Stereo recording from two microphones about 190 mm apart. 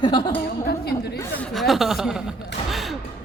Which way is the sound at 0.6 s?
55° left (ahead or behind).